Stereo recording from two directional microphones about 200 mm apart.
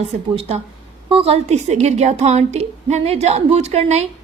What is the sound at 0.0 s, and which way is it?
A woman's voice, 30° right (ahead or behind).